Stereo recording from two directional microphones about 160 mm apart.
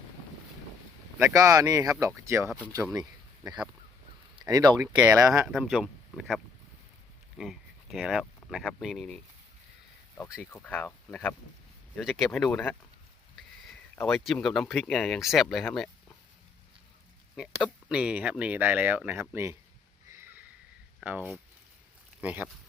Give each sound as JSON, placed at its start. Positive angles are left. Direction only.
{"t": 1.2, "sound": "speech", "side_deg": -20}
{"t": 4.4, "sound": "speech", "side_deg": -25}
{"t": 4.9, "sound": "speech", "side_deg": -15}
{"t": 5.5, "sound": "speech", "side_deg": 0}
{"t": 10.4, "sound": "speech", "side_deg": 10}
{"t": 11.9, "sound": "speech", "side_deg": 0}
{"t": 14.1, "sound": "speech", "side_deg": 0}
{"t": 17.3, "sound": "speech", "side_deg": 0}
{"t": 20.1, "sound": "sniff", "side_deg": -15}
{"t": 21.0, "sound": "speech", "side_deg": -10}